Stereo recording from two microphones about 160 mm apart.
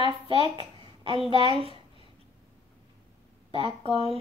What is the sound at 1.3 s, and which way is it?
Speech, 35° right (ahead or behind).